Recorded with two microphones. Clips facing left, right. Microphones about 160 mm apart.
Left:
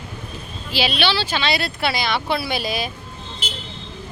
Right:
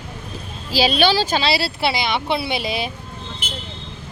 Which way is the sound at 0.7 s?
40° right (ahead or behind).